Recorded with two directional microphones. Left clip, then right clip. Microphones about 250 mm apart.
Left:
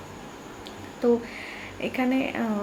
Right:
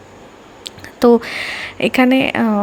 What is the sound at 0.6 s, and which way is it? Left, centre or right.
A woman's voice, right.